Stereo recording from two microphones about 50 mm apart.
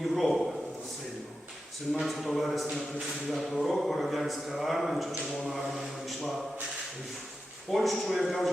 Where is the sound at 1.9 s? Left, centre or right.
Centre.